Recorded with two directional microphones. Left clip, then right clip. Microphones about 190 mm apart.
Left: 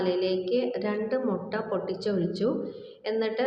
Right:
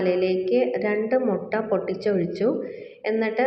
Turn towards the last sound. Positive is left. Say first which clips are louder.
# right 4 dB
turn(degrees=-20)  # may be behind; listen again after turning